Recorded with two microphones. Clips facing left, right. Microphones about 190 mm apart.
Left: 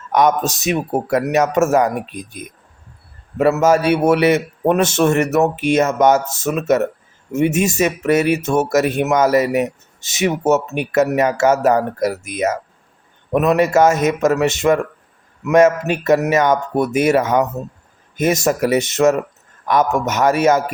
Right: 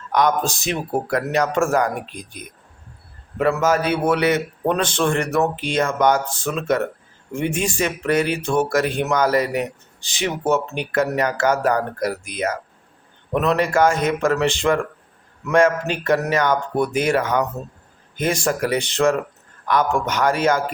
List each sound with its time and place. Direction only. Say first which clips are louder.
0.1 s speech: left 3 dB; 20° left (ahead or behind)